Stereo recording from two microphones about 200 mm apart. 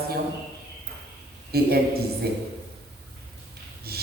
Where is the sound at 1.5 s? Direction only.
50° right (ahead or behind).